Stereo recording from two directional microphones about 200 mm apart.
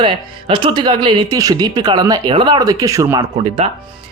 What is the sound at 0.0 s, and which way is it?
Speech, 25° right (ahead or behind).